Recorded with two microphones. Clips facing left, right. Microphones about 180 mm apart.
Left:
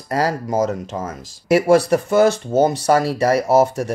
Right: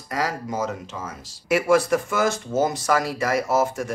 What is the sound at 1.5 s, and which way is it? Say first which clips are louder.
Speech: left 5 dB; 35° left (ahead or behind).